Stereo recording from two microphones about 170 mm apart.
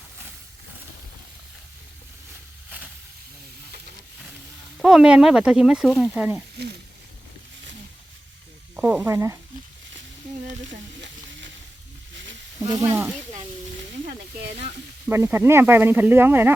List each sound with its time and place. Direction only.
2.6 s a sound: 5° right (ahead or behind)
4.8 s speech: 5° right (ahead or behind)
8.7 s speech: 10° right (ahead or behind)
10.7 s sizzle: 90° right
12.6 s speech: 20° right (ahead or behind)
14.0 s speech: 60° right (ahead or behind)
14.5 s speech: 40° right (ahead or behind)
15.1 s speech: 15° right (ahead or behind)